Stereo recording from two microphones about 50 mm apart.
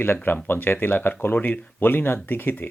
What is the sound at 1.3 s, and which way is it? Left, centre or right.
Speech, left.